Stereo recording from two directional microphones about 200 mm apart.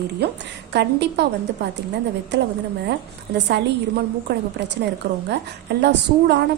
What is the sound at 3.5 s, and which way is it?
Speech, 55° right (ahead or behind).